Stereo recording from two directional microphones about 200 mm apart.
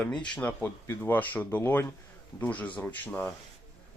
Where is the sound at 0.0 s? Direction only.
5° left (ahead or behind).